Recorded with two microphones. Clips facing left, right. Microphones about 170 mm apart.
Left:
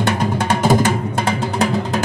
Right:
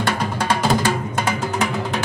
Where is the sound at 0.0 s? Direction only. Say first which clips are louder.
Left 3 dB; 25° left (ahead or behind).